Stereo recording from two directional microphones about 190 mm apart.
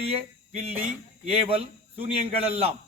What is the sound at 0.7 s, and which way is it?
Speech, 10° right (ahead or behind).